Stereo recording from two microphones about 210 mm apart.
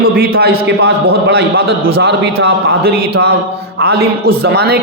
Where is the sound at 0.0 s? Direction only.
45° right (ahead or behind).